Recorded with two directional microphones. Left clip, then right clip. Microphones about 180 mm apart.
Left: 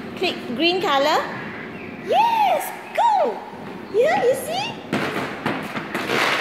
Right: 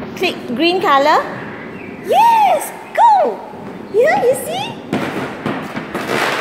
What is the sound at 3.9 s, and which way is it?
Speech, 5° right (ahead or behind).